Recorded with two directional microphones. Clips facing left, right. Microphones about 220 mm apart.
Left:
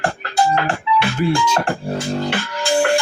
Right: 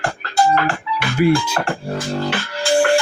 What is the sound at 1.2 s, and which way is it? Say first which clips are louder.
Music: right 7 dB; 10° right (ahead or behind).